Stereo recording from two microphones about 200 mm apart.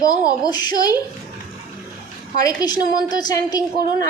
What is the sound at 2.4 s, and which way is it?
A woman's voice, 20° left (ahead or behind).